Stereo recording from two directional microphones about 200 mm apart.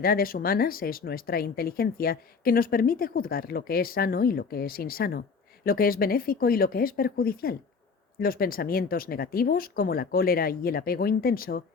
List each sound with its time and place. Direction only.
0.0 s speech: 45° left (ahead or behind)